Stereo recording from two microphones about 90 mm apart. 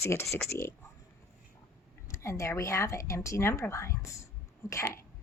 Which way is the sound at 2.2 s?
35° left (ahead or behind).